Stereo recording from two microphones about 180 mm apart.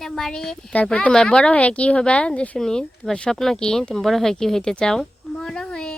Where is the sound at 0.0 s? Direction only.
5° left (ahead or behind).